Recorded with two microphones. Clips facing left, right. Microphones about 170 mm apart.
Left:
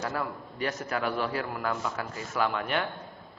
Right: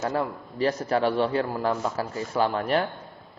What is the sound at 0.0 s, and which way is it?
A man's voice, 20° right (ahead or behind).